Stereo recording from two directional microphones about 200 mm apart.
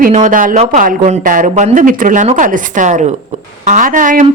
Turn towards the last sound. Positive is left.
turn(degrees=-40)  # may be behind; listen again after turning